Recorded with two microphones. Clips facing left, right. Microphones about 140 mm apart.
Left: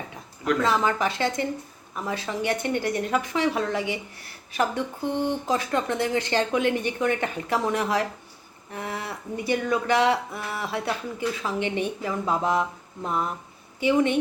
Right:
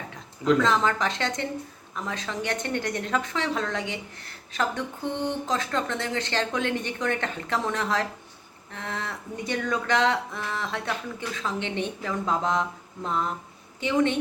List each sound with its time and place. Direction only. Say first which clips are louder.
0.6 s a woman's voice: left 1 dB; 5° left (ahead or behind)